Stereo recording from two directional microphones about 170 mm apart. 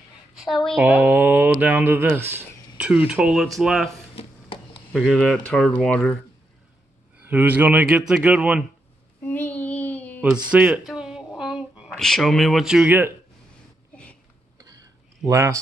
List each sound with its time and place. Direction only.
0.4 s speech: centre (ahead or behind)
0.8 s speech: 10° right (ahead or behind)
4.2 s a sound: 35° left (ahead or behind)
4.9 s speech: 5° left (ahead or behind)
7.2 s speech: 10° right (ahead or behind)
9.2 s child singing: 10° left (ahead or behind)
10.5 s speech: 10° right (ahead or behind)
10.9 s a sound: 5° right (ahead or behind)
14.6 s a sound: 20° right (ahead or behind)